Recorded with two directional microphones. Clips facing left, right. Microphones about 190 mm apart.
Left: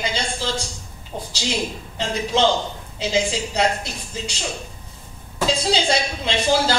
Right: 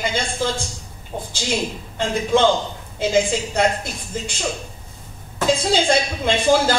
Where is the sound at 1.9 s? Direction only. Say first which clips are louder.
Right 4 dB; 50° right (ahead or behind).